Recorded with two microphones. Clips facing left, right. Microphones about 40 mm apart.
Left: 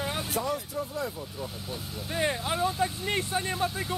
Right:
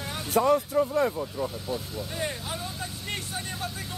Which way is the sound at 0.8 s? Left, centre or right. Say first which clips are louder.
Right 9 dB; right.